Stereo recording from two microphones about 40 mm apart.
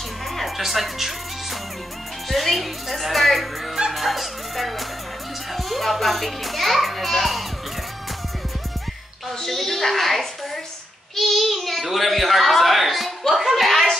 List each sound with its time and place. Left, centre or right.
0.4 s music: centre
2.2 s a child's voice: centre
9.4 s a child's voice: centre